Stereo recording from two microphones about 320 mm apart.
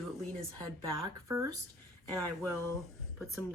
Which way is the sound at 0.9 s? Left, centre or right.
Centre.